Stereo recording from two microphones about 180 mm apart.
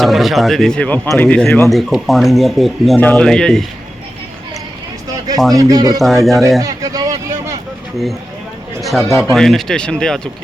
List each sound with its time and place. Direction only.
0.0 s speech: centre (ahead or behind)
5.1 s a sound: 20° right (ahead or behind)
5.5 s speech: 20° right (ahead or behind)
6.0 s speech: centre (ahead or behind)
6.6 s a sound: 20° right (ahead or behind)
8.8 s speech: centre (ahead or behind)